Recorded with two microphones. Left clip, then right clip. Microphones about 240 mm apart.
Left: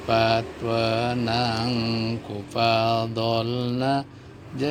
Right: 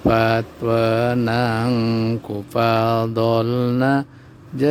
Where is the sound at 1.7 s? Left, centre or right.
Right.